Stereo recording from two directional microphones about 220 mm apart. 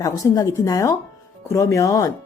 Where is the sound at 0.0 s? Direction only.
15° left (ahead or behind).